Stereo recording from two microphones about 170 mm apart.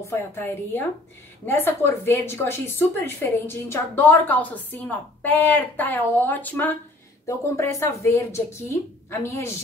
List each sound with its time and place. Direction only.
0.1 s a woman's voice: 15° left (ahead or behind)